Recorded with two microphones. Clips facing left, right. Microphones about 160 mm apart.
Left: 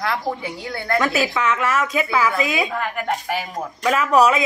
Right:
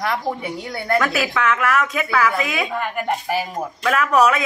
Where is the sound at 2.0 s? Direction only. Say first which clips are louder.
Even; 20° left (ahead or behind).